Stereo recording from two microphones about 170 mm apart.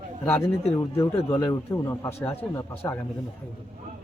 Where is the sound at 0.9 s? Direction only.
15° left (ahead or behind).